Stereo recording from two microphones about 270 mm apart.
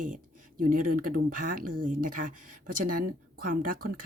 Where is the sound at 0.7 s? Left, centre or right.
Right.